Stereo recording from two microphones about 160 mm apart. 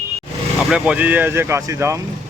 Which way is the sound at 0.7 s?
10° right (ahead or behind).